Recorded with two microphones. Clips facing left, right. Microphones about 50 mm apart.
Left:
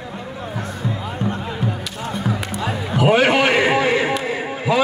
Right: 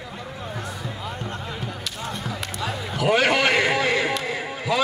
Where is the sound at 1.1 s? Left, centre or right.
Left.